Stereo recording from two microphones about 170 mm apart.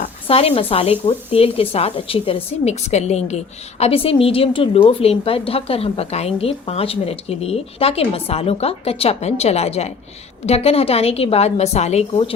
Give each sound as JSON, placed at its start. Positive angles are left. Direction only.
{"t": 0.0, "sound": "a woman's voice", "side_deg": 35}